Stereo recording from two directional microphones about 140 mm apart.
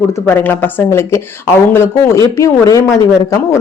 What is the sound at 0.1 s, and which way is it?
Speech, 15° left (ahead or behind).